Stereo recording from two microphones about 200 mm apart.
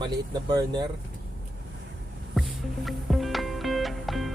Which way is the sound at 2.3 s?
Centre (ahead or behind).